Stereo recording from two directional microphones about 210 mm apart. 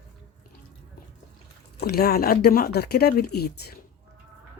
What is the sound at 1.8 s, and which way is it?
Speech, 45° left (ahead or behind).